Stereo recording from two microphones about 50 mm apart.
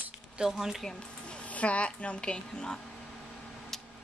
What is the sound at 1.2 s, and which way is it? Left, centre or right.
A woman's voice, left.